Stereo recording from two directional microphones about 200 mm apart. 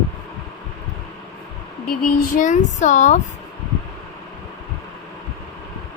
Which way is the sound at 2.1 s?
40° left (ahead or behind).